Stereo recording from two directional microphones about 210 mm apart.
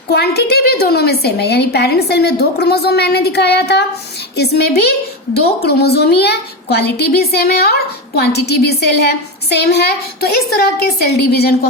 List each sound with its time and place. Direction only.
0.1 s a woman's voice: 50° left (ahead or behind)